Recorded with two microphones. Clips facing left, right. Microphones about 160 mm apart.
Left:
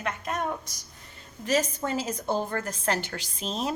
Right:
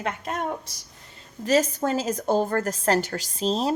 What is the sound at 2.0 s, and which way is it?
A woman's voice, 40° right (ahead or behind).